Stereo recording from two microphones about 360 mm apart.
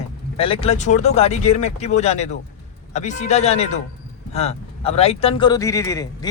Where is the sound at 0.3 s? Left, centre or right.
Centre.